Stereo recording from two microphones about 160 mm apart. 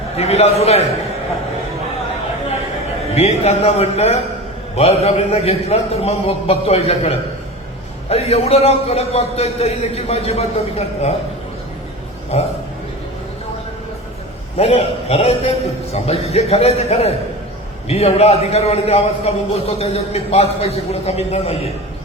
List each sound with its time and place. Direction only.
0.2 s a man's voice: 40° left (ahead or behind)
3.2 s a man's voice: 40° left (ahead or behind)
14.6 s a man's voice: 40° left (ahead or behind)